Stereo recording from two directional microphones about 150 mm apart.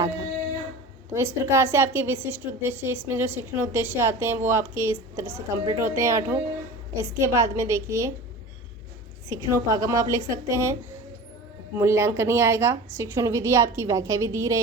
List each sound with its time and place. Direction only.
1.1 s a woman's voice: 15° right (ahead or behind)
9.3 s a woman's voice: 20° right (ahead or behind)
11.8 s a woman's voice: 15° right (ahead or behind)